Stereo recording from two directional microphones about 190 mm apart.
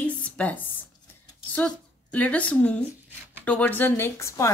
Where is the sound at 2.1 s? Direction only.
5° left (ahead or behind).